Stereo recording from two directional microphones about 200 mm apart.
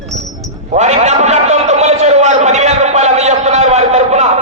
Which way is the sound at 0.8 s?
35° right (ahead or behind).